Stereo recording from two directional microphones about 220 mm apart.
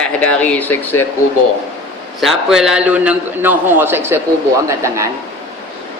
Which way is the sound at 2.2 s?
Centre (ahead or behind).